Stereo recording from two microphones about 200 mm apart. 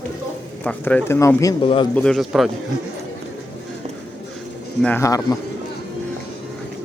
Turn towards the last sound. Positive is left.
turn(degrees=15)  # may be behind; listen again after turning